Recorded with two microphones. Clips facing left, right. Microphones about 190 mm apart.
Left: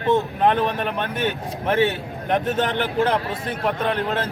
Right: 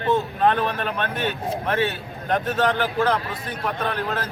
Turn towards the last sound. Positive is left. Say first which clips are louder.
# left 3 dB
turn(degrees=20)  # may be behind; listen again after turning